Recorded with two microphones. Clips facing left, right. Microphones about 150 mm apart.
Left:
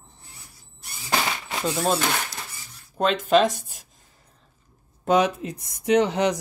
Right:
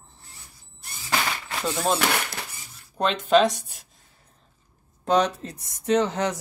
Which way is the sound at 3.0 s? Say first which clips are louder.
Even; centre (ahead or behind).